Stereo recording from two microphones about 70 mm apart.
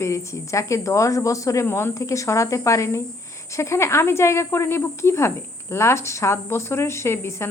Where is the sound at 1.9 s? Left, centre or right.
Left.